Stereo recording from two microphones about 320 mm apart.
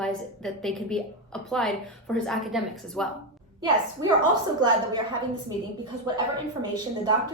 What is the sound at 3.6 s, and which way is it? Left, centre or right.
A woman's voice, centre.